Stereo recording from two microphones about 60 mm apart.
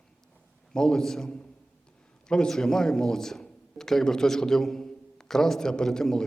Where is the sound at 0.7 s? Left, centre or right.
Centre.